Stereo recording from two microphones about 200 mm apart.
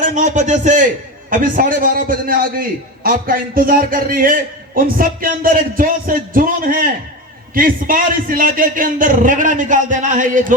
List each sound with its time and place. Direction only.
0.0 s a man's voice: 40° right (ahead or behind)